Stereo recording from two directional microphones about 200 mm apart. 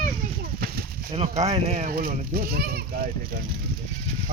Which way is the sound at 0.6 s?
50° right (ahead or behind).